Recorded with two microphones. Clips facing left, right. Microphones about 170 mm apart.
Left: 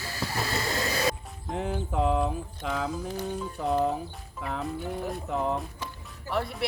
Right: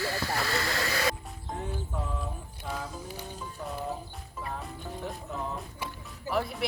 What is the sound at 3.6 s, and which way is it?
Music, 90° left.